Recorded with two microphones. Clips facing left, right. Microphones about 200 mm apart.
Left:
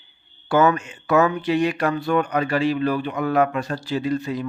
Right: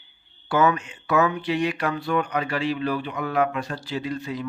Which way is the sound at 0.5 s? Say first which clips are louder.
Left 3 dB; 45° left (ahead or behind).